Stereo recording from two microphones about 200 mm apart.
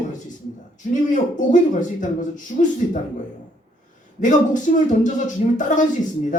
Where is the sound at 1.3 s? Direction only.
40° left (ahead or behind).